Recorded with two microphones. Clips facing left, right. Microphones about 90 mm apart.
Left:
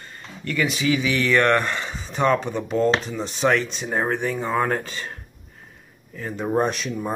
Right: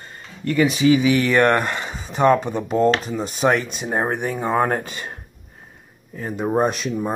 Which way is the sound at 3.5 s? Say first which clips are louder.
Even; 50° right (ahead or behind).